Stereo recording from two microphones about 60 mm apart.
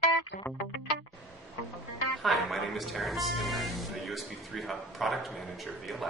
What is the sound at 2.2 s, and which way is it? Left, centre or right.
A man's voice, centre.